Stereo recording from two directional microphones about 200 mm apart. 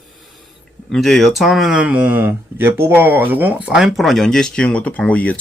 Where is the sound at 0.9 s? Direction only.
Centre (ahead or behind).